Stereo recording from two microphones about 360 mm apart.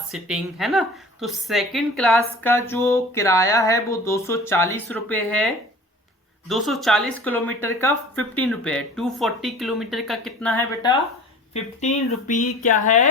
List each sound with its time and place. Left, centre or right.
0.1 s a woman's voice: centre
6.5 s speech: centre
11.5 s a woman's voice: centre